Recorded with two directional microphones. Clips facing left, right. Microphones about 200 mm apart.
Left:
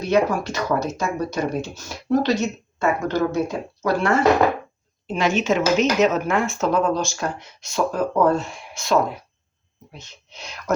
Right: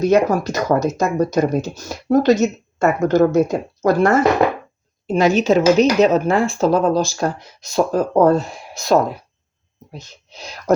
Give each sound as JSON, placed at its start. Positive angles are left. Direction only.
{"t": 0.0, "sound": "speech", "side_deg": -45}